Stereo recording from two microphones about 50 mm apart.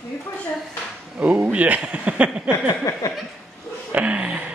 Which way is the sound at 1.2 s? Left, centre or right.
Right.